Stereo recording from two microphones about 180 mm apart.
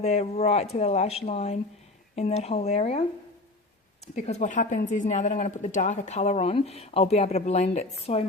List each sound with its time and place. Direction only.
0.0 s speech: 35° left (ahead or behind)